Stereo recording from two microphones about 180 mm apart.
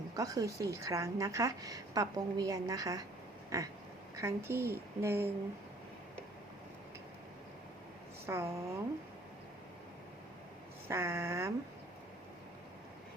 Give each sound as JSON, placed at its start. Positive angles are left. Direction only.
{"t": 0.2, "sound": "a woman's voice", "side_deg": -20}
{"t": 8.3, "sound": "a woman's voice", "side_deg": -15}
{"t": 10.8, "sound": "a woman's voice", "side_deg": -15}